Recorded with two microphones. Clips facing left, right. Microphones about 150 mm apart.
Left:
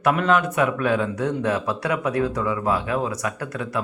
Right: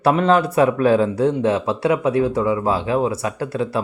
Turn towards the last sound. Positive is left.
turn(degrees=-30)  # may be behind; listen again after turning